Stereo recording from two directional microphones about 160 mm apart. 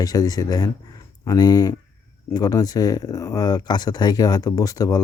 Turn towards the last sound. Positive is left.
turn(degrees=25)  # may be behind; listen again after turning